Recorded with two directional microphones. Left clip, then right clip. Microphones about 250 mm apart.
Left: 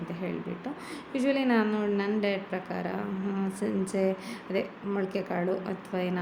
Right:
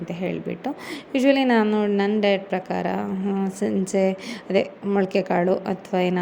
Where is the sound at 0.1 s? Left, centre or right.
Right.